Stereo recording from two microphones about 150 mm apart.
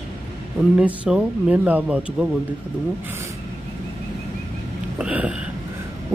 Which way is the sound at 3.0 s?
15° right (ahead or behind).